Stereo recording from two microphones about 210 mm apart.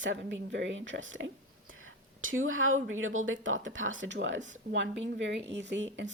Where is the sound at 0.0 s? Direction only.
60° right (ahead or behind).